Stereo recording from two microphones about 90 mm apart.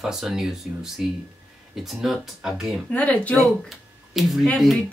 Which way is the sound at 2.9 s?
15° left (ahead or behind).